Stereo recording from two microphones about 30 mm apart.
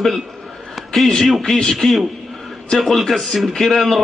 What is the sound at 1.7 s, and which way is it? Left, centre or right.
A man's voice, centre.